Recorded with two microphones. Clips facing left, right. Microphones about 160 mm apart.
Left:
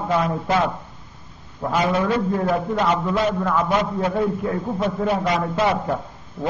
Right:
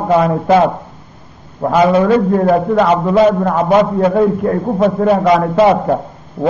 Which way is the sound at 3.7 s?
65° right (ahead or behind).